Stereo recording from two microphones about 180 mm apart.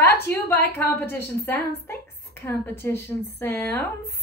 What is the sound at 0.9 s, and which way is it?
Speech, 10° left (ahead or behind).